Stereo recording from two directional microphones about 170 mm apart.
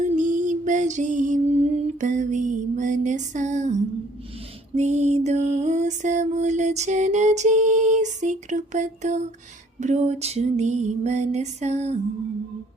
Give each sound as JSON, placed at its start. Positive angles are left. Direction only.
{"t": 0.0, "sound": "music", "side_deg": -45}